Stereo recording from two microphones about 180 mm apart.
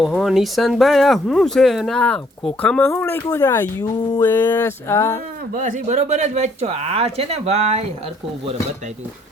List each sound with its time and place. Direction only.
0.1 s speech: centre (ahead or behind); by 5.2 s 15° left (ahead or behind)
5.5 s speech: 45° right (ahead or behind)